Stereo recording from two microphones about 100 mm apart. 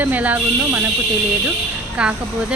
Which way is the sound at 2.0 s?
10° right (ahead or behind).